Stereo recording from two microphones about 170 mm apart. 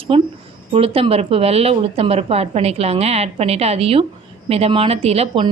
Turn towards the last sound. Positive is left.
turn(degrees=-35)  # may be behind; listen again after turning